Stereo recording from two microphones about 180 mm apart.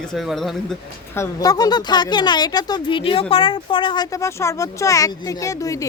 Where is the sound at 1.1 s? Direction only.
15° left (ahead or behind).